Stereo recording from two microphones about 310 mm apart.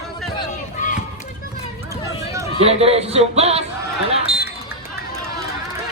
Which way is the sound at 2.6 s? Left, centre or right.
Centre.